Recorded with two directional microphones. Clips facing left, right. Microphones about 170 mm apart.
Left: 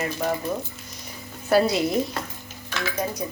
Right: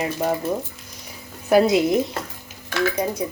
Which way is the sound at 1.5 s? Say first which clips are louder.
Right 4 dB; 20° right (ahead or behind).